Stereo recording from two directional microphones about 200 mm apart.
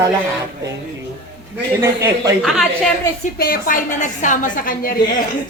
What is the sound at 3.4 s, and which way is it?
A woman's voice, 45° left (ahead or behind).